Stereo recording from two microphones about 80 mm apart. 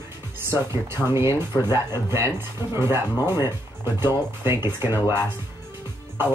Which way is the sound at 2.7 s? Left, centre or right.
Right.